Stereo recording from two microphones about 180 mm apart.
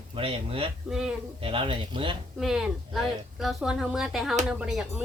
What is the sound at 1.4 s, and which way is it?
Speech, 30° right (ahead or behind).